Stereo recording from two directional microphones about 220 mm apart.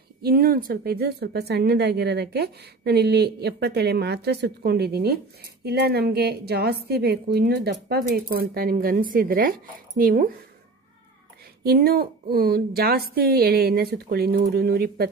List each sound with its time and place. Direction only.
0.2 s a woman's voice: 45° right (ahead or behind)
11.6 s a woman's voice: 45° right (ahead or behind)